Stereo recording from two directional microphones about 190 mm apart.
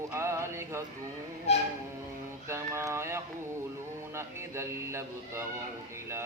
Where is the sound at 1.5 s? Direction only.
35° left (ahead or behind).